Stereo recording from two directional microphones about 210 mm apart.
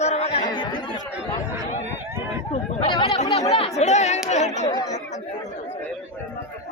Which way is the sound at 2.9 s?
25° left (ahead or behind).